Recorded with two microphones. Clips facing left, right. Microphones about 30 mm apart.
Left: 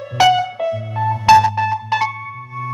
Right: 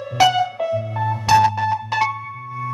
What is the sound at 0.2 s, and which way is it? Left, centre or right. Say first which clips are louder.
Music: left 2 dB; centre.